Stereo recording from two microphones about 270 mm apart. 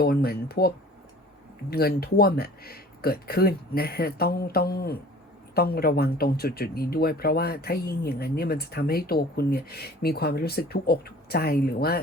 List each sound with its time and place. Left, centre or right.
0.0 s speech: left
1.7 s speech: left